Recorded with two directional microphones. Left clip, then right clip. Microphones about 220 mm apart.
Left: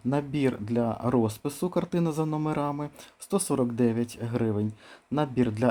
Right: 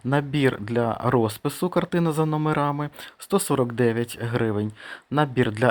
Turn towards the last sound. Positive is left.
turn(degrees=-10)  # may be behind; listen again after turning